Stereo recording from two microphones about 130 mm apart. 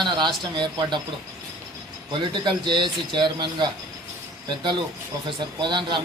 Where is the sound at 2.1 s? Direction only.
35° right (ahead or behind).